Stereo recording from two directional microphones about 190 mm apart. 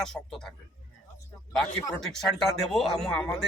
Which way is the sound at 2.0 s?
Centre (ahead or behind).